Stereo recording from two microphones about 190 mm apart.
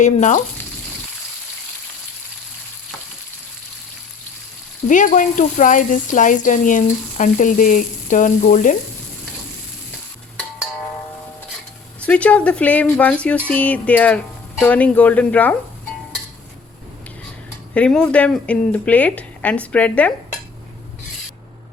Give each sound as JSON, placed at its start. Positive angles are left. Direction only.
{"t": 0.0, "sound": "frying", "side_deg": 40}
{"t": 4.9, "sound": "speech", "side_deg": 40}
{"t": 12.0, "sound": "speech", "side_deg": 5}
{"t": 17.7, "sound": "speech", "side_deg": 5}